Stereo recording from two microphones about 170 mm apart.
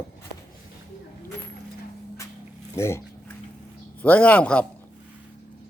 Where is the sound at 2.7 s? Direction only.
15° left (ahead or behind).